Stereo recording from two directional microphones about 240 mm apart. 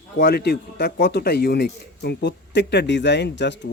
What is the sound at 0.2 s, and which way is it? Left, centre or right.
A man's voice, left.